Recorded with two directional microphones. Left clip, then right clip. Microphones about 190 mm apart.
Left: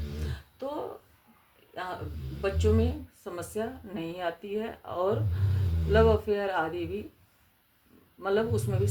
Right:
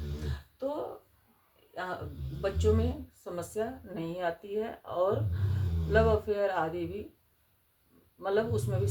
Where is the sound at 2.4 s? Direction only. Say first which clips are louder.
Left 2 dB; 30° left (ahead or behind).